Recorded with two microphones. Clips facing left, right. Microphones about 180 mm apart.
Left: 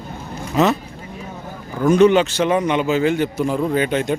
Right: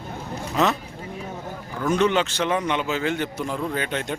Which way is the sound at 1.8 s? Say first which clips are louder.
Left 8 dB; 10° left (ahead or behind).